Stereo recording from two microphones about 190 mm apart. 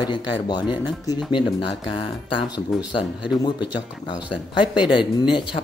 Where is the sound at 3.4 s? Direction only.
25° left (ahead or behind).